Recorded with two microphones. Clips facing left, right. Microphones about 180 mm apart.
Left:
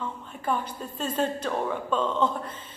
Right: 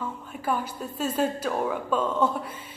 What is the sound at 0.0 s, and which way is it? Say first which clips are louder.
Speech: right 1 dB; 10° right (ahead or behind).